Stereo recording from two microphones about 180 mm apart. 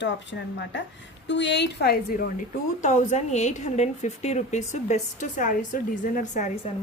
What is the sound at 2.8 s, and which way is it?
A woman's voice, 40° left (ahead or behind).